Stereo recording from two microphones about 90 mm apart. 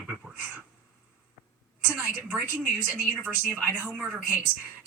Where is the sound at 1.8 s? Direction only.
20° right (ahead or behind).